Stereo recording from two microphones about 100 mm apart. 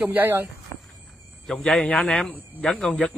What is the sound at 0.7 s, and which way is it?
Walk, 25° left (ahead or behind).